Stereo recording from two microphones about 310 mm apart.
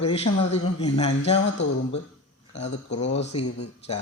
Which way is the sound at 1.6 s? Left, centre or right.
Left.